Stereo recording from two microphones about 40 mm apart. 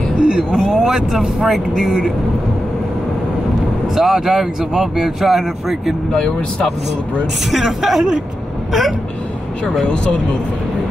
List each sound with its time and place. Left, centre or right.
0.2 s speech: right
0.7 s speech: centre
3.9 s speech: centre
6.1 s speech: centre
7.6 s speech: centre